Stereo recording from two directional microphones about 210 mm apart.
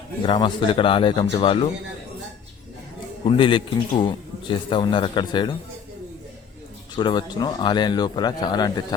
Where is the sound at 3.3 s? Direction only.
25° left (ahead or behind).